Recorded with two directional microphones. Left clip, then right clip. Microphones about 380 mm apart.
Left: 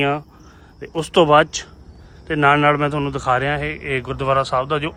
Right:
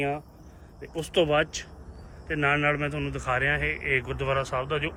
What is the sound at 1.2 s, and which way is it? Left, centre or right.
A man's voice, left.